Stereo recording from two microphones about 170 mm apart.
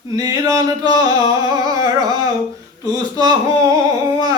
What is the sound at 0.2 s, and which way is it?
Singing, 20° right (ahead or behind).